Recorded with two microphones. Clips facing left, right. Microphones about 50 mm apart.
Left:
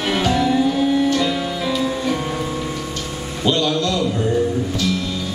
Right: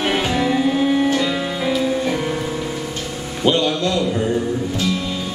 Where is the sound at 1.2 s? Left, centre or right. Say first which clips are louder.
Even; centre.